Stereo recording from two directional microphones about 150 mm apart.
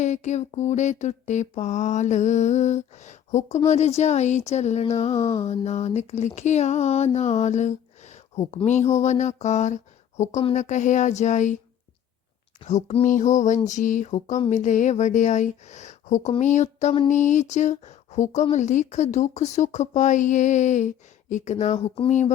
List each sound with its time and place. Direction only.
0.0 s speech: 50° left (ahead or behind)
5.1 s mantra: 20° left (ahead or behind)
5.4 s speech: 45° left (ahead or behind)
12.6 s speech: 50° left (ahead or behind)
13.1 s a sound: 55° left (ahead or behind)
13.7 s speech: 55° left (ahead or behind)